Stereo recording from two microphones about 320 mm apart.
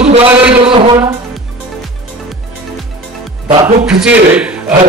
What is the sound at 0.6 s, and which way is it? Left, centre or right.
Speech, centre.